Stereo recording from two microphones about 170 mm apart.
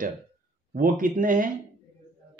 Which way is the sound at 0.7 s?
55° right (ahead or behind).